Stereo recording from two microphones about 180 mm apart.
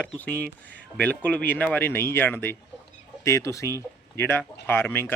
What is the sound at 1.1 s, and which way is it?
Speech, 5° left (ahead or behind).